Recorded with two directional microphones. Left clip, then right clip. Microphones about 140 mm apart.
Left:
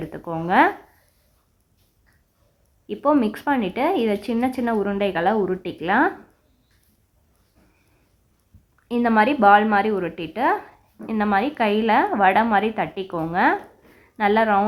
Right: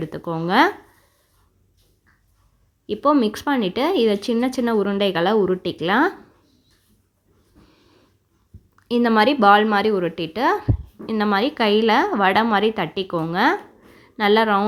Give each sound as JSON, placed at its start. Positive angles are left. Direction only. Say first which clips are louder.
{"t": 0.0, "sound": "speech", "louder": "right 2 dB", "side_deg": -35}
{"t": 2.8, "sound": "speech", "louder": "right 2 dB", "side_deg": -30}
{"t": 8.9, "sound": "a woman's voice", "louder": "right 2 dB", "side_deg": -35}